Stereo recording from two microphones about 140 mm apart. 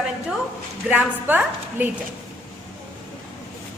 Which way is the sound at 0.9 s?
10° right (ahead or behind).